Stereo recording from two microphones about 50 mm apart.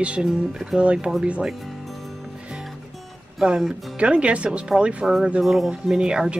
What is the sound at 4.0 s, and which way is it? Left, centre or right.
A woman's voice, right.